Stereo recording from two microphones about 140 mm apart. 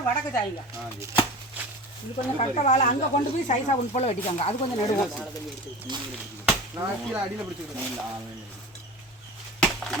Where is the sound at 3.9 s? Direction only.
45° left (ahead or behind).